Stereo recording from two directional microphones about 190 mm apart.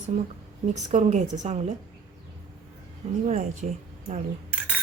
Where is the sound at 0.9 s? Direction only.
40° right (ahead or behind).